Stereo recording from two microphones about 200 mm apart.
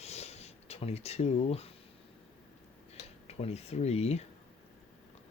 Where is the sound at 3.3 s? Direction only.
30° left (ahead or behind).